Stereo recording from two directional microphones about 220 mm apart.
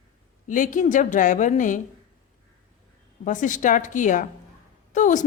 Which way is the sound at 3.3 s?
35° left (ahead or behind).